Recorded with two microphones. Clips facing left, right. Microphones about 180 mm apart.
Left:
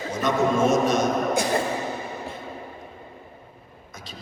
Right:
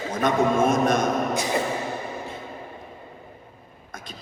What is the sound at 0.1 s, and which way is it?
Speech, 55° right (ahead or behind).